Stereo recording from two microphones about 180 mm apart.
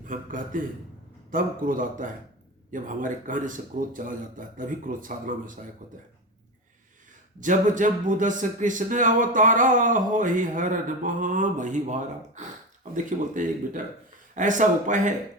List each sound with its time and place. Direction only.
0.0 s speech: 45° right (ahead or behind)
7.3 s speech: 45° right (ahead or behind)